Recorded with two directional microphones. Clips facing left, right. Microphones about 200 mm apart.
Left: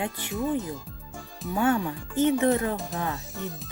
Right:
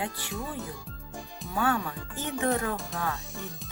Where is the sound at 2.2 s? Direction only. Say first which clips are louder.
Left 7 dB; 20° left (ahead or behind).